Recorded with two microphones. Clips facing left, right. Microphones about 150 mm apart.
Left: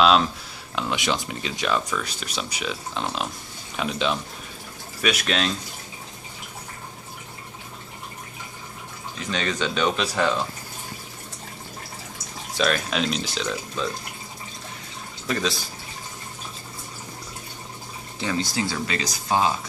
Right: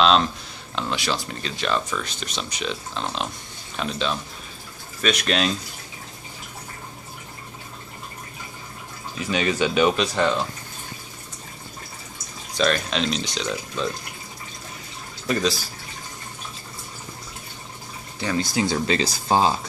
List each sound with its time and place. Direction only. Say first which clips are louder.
0.0 s speech: even; 5° left (ahead or behind)
5.0 s speech: right 2 dB; centre (ahead or behind)
9.2 s speech: right 4 dB; 10° right (ahead or behind)
9.9 s speech: right 2 dB; centre (ahead or behind)
12.5 s speech: right 1 dB; 5° left (ahead or behind)
15.2 s speech: right 3 dB; 5° right (ahead or behind)
18.4 s speech: right 4 dB; 15° right (ahead or behind)